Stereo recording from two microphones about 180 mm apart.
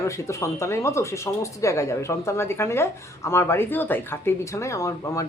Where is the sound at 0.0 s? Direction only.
15° left (ahead or behind).